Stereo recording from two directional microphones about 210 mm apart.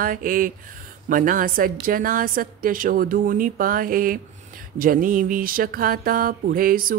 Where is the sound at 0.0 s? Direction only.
40° right (ahead or behind).